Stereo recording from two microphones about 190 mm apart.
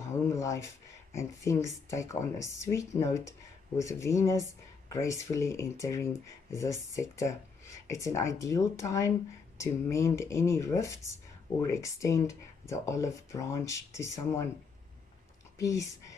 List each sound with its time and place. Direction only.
0.3 s a sound: 15° left (ahead or behind)
1.1 s speech: 15° left (ahead or behind)
15.6 s speech: 15° left (ahead or behind)